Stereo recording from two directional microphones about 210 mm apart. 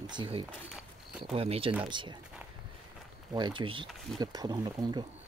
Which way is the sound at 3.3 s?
20° right (ahead or behind).